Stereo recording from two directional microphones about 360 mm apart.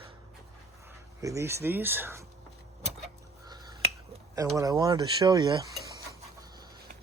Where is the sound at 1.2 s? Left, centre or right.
Centre.